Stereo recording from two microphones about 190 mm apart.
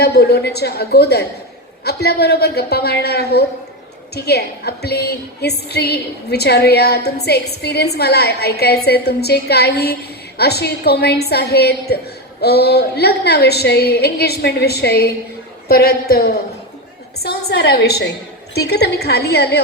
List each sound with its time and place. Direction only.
0.0 s a woman's voice: 55° left (ahead or behind)